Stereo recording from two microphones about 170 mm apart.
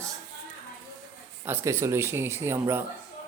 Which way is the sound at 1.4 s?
15° right (ahead or behind).